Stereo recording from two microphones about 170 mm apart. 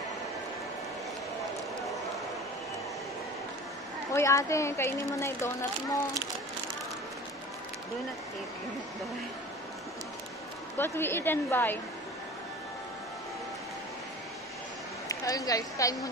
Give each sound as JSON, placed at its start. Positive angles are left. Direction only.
{"t": 4.1, "sound": "a woman's voice", "side_deg": 15}
{"t": 10.8, "sound": "a woman's voice", "side_deg": 15}
{"t": 15.0, "sound": "speech", "side_deg": 20}